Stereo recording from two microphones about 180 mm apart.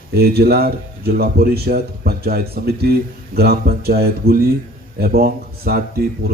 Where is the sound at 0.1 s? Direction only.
60° right (ahead or behind).